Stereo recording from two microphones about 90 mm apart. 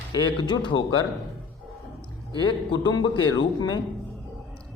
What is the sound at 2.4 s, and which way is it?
A man's voice, 60° left (ahead or behind).